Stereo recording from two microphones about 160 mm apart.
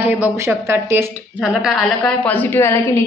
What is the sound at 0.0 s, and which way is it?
Speech, 10° right (ahead or behind).